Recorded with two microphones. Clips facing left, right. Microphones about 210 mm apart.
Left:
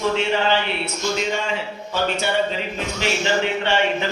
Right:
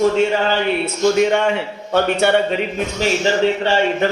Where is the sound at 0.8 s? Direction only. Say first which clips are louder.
Right 9 dB; 65° right (ahead or behind).